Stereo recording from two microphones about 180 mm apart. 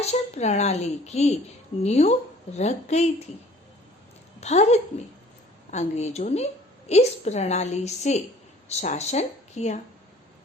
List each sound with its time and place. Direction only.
0.0 s a woman's voice: 35° left (ahead or behind)
4.4 s a woman's voice: 35° left (ahead or behind)